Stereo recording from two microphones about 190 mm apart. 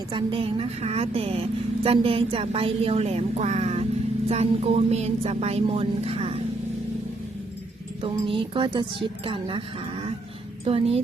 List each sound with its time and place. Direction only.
0.1 s a woman's voice: 25° right (ahead or behind)
8.0 s speech: 25° right (ahead or behind)